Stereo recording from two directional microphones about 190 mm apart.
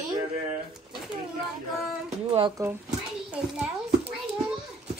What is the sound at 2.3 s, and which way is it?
Speech, 25° right (ahead or behind).